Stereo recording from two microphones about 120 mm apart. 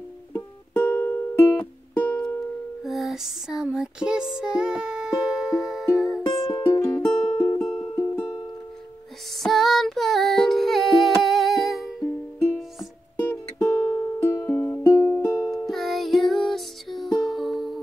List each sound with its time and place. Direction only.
0.3 s music: 15° left (ahead or behind)
2.8 s music: centre (ahead or behind)
6.7 s music: 15° left (ahead or behind)
7.0 s music: 5° left (ahead or behind)
9.4 s music: centre (ahead or behind)
13.6 s music: 30° left (ahead or behind)
14.2 s music: 15° left (ahead or behind)
14.9 s music: 25° left (ahead or behind)
15.6 s music: centre (ahead or behind)